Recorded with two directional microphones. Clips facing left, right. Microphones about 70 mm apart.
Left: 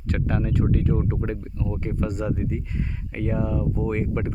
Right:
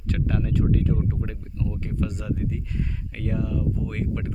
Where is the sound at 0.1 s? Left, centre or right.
Left.